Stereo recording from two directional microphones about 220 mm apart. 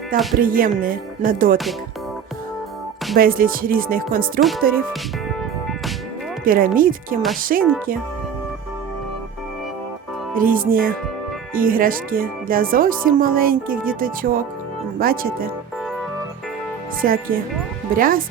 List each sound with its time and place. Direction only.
0.1 s speech: 40° right (ahead or behind)
3.2 s speech: 40° right (ahead or behind)
4.4 s music: centre (ahead or behind)
6.4 s speech: 40° right (ahead or behind)
10.3 s speech: 40° right (ahead or behind)
17.0 s speech: 40° right (ahead or behind)